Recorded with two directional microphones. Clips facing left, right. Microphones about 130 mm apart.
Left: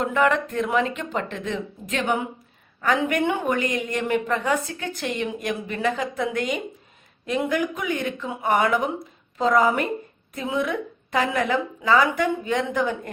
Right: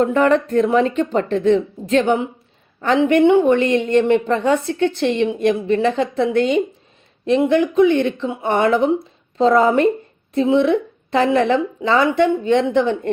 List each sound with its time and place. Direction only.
0.0 s a woman's voice: 35° right (ahead or behind)